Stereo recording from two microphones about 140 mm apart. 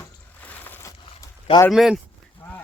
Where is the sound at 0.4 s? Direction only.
10° left (ahead or behind).